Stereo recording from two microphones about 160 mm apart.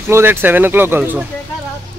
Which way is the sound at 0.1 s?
15° right (ahead or behind).